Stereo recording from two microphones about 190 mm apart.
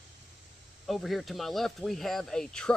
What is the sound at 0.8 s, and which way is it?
Speech, centre (ahead or behind).